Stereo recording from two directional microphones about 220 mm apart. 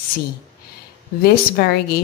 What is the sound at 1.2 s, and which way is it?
Speech, 45° left (ahead or behind).